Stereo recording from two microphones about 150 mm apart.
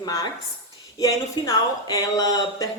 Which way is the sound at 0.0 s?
25° left (ahead or behind).